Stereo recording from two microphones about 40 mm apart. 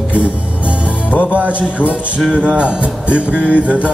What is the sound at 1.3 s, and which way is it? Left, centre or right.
Music, right.